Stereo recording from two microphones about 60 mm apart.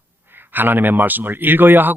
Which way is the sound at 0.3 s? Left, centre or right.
Right.